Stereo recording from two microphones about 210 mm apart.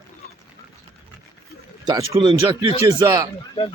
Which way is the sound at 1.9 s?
25° right (ahead or behind).